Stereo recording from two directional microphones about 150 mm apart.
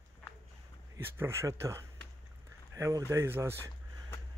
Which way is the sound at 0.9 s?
15° right (ahead or behind).